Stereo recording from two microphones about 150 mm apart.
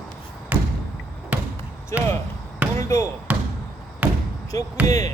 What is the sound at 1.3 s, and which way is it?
Basketball bounce, 10° right (ahead or behind).